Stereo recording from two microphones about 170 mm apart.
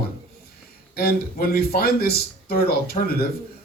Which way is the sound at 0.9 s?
60° left (ahead or behind).